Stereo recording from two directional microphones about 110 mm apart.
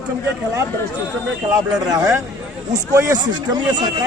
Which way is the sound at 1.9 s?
30° right (ahead or behind).